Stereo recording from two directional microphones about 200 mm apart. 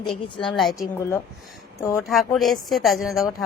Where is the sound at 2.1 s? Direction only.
Centre (ahead or behind).